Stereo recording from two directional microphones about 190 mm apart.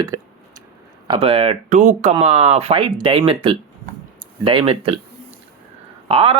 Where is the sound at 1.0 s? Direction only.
30° right (ahead or behind).